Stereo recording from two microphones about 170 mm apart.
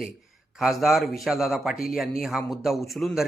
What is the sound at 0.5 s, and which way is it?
Speech, centre (ahead or behind).